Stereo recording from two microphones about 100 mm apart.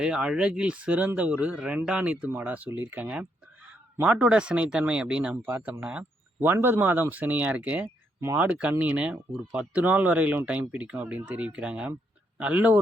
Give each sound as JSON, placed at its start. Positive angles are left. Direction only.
{"t": 0.0, "sound": "speech", "side_deg": -10}
{"t": 5.5, "sound": "speech", "side_deg": -25}